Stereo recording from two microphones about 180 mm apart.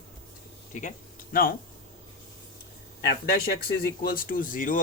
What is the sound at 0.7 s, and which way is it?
Speech, 45° left (ahead or behind).